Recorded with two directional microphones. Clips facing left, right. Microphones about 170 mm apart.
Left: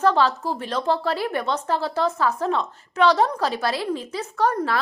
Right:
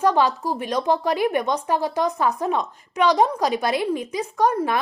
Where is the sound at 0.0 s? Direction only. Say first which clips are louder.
Even; 15° right (ahead or behind).